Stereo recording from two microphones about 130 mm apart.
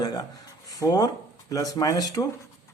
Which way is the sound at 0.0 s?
30° left (ahead or behind).